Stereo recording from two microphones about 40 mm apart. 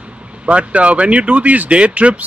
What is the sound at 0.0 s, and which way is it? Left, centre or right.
Speech, right.